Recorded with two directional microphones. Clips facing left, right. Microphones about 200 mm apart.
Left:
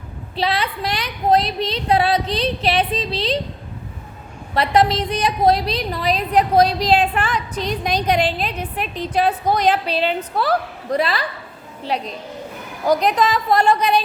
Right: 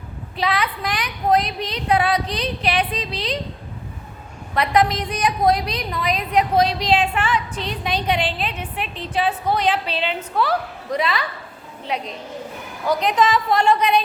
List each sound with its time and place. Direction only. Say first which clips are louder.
0.3 s speech: left 1 dB; 30° left (ahead or behind)
4.5 s a woman's voice: left 2 dB; 30° left (ahead or behind)